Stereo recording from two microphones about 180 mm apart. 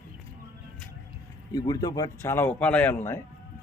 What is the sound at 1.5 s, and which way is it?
A man's voice, 20° left (ahead or behind).